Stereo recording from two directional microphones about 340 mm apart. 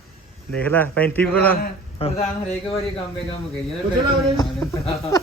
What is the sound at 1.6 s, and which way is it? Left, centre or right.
Music, centre.